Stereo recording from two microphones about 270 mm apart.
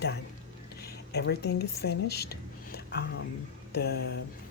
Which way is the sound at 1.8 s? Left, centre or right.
Left.